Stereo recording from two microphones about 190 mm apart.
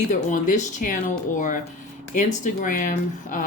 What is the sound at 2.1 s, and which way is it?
Speech, 40° left (ahead or behind).